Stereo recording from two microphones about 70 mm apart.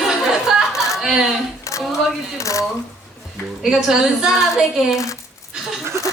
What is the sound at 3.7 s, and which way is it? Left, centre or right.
A woman's voice, centre.